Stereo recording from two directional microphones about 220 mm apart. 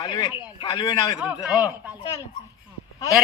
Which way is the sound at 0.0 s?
20° left (ahead or behind).